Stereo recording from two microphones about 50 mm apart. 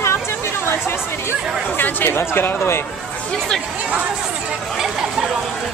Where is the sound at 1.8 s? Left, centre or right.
Left.